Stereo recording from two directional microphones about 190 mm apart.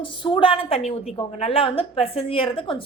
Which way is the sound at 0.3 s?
30° left (ahead or behind).